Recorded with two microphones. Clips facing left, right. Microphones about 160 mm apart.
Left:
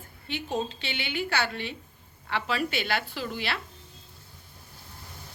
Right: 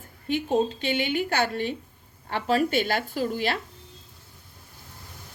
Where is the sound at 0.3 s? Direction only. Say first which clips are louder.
Right 7 dB; 45° right (ahead or behind).